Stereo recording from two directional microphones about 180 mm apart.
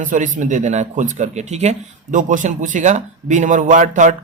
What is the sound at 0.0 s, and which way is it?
Speech, 45° right (ahead or behind).